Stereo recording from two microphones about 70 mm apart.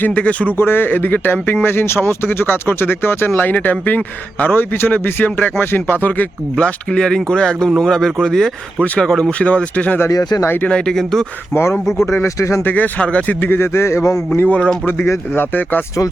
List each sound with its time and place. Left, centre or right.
0.0 s speech: centre
0.5 s speech: left
10.1 s speech: left
10.4 s a man's voice: left
10.7 s speech: centre
11.5 s a man's voice: left
12.6 s speech: left
13.4 s a man's voice: left
14.3 s speech: left